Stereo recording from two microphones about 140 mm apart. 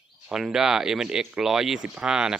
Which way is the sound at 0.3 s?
5° right (ahead or behind).